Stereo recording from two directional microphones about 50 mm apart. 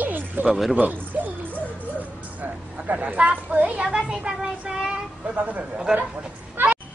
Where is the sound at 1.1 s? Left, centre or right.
Right.